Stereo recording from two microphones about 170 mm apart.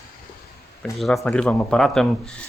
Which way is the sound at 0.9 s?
Centre (ahead or behind).